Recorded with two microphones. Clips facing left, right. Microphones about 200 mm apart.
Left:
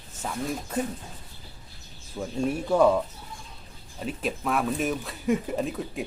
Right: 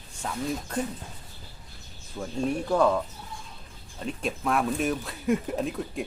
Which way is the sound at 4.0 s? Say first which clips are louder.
Even; 5° left (ahead or behind).